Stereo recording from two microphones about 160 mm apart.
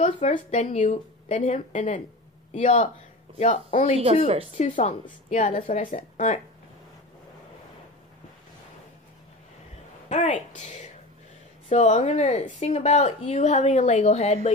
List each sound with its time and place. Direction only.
0.0 s speech: 45° left (ahead or behind)
10.0 s a woman's voice: 50° left (ahead or behind)